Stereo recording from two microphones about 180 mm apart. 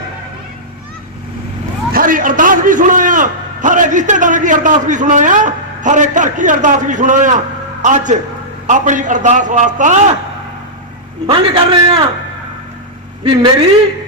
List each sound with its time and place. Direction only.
1.9 s a man's voice: 50° right (ahead or behind)
11.3 s a man's voice: 30° right (ahead or behind)